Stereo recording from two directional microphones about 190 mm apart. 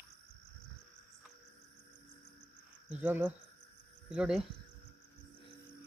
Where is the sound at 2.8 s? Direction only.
5° right (ahead or behind).